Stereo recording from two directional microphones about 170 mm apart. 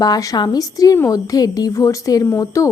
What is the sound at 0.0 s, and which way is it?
A woman's voice, 20° left (ahead or behind).